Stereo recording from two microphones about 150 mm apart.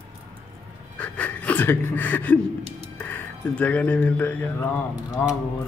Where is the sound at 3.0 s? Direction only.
10° left (ahead or behind).